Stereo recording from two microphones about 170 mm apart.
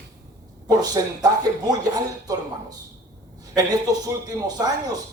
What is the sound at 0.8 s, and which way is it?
Speech, 25° right (ahead or behind).